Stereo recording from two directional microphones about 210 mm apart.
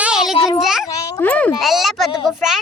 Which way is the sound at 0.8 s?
10° left (ahead or behind).